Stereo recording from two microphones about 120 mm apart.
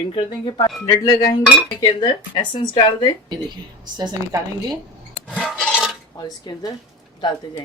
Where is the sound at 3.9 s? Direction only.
35° right (ahead or behind).